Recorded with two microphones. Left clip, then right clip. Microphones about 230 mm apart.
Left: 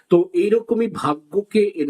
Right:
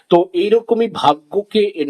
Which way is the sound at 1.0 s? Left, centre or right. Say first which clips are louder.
Right 7 dB; right.